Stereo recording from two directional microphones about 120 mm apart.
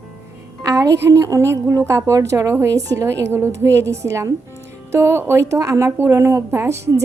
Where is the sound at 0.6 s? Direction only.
25° right (ahead or behind).